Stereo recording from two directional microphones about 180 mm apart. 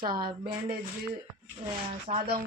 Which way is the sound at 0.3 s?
25° right (ahead or behind).